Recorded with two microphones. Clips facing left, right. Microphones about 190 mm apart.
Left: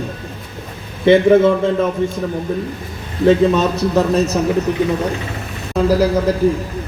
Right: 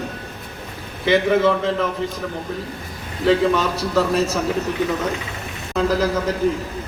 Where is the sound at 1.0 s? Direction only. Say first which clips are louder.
Left 7 dB; 30° left (ahead or behind).